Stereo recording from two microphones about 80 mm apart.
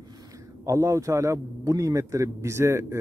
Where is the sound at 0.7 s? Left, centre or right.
Right.